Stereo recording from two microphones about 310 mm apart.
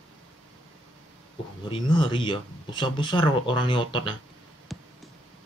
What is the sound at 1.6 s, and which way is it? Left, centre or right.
Speech, centre.